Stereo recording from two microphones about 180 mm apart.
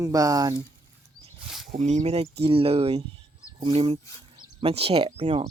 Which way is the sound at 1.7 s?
40° right (ahead or behind).